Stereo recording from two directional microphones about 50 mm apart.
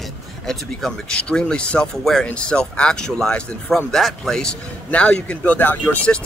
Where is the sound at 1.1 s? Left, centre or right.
Centre.